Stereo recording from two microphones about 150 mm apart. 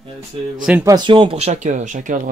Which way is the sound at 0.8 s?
30° right (ahead or behind).